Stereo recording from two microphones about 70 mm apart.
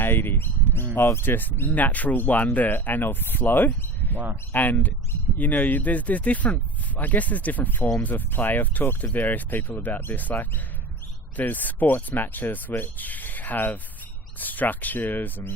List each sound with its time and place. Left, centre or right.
0.0 s speech: left